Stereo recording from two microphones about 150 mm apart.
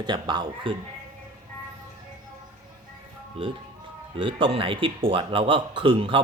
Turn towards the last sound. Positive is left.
turn(degrees=-35)  # may be behind; listen again after turning